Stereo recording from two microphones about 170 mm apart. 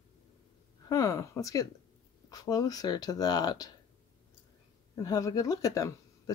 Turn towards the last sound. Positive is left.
turn(degrees=20)  # may be behind; listen again after turning